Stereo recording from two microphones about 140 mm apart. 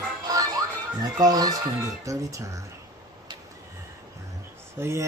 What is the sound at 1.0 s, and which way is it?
Speech, 25° right (ahead or behind).